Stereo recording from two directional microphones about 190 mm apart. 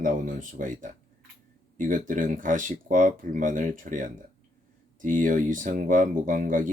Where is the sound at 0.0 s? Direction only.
45° right (ahead or behind).